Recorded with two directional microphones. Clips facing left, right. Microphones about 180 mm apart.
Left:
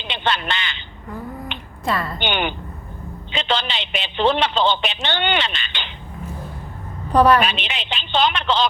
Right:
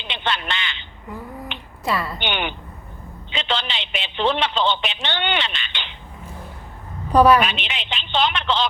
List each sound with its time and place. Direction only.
0.1 s a sound: 40° left (ahead or behind)
1.8 s a woman's voice: 5° right (ahead or behind)
2.1 s a man's voice: 40° left (ahead or behind)
7.4 s a man's voice: 35° left (ahead or behind)